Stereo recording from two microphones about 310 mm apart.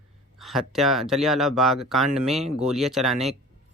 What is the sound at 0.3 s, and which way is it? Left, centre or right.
Speech, centre.